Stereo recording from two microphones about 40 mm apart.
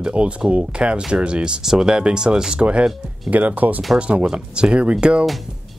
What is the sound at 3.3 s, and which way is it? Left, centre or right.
Speech, right.